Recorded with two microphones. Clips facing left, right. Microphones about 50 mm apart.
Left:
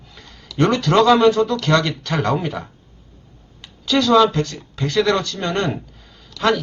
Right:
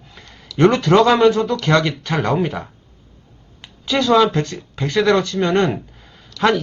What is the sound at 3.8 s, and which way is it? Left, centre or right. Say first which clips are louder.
Speech: even; right.